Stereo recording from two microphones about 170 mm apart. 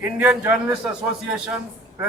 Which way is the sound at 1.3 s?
5° right (ahead or behind).